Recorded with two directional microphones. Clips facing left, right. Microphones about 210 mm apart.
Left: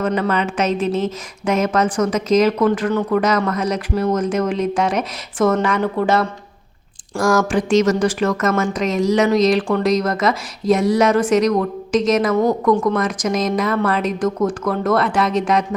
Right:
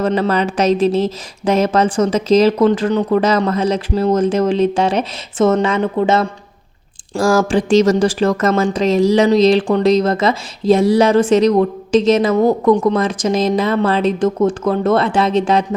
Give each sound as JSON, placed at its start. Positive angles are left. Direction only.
{"t": 0.0, "sound": "speech", "side_deg": -30}